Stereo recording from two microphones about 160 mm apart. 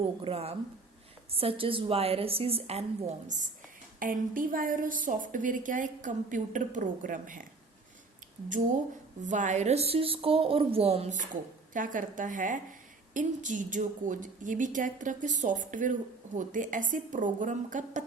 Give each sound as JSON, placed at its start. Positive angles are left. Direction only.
{"t": 0.2, "sound": "a woman's voice", "side_deg": -40}
{"t": 9.2, "sound": "a woman's voice", "side_deg": -50}
{"t": 11.7, "sound": "a woman's voice", "side_deg": -55}